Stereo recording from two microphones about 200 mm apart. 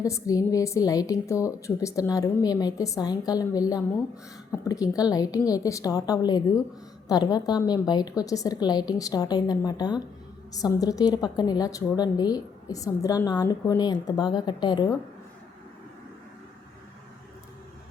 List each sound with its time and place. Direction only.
0.0 s a woman's voice: 15° left (ahead or behind)